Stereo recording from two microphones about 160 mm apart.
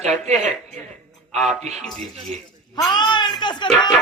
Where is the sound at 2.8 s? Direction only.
25° left (ahead or behind).